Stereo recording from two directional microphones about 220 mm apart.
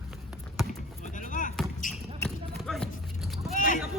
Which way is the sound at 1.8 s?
35° left (ahead or behind).